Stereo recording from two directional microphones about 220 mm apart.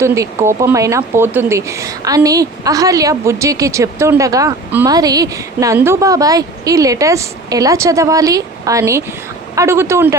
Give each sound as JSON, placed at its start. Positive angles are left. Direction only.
{"t": 0.0, "sound": "speech", "side_deg": -15}